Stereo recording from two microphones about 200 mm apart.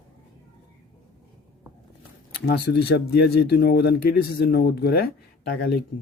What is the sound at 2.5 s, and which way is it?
Speech, 55° left (ahead or behind).